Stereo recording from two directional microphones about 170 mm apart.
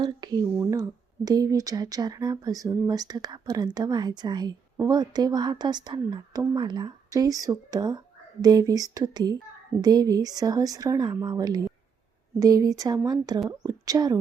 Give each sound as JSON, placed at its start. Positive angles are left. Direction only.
{"t": 0.0, "sound": "speech", "side_deg": -25}